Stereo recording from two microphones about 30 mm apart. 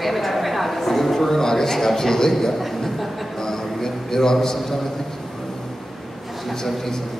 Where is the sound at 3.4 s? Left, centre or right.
Centre.